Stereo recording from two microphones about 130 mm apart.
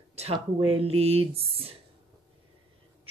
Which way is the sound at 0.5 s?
45° right (ahead or behind).